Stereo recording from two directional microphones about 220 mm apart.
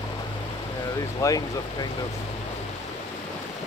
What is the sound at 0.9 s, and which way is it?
Speech, 15° left (ahead or behind).